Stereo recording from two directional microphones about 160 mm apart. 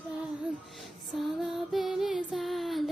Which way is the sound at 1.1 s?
Centre (ahead or behind).